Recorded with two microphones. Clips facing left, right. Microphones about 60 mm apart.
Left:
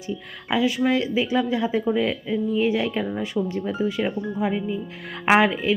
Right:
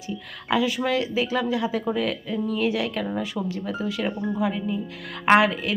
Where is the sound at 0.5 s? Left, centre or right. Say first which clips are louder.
Left 2 dB; left.